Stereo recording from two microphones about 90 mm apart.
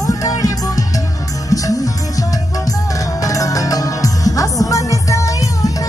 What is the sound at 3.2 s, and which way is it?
Music, 40° left (ahead or behind).